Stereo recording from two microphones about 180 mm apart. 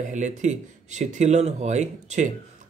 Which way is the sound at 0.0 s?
40° right (ahead or behind).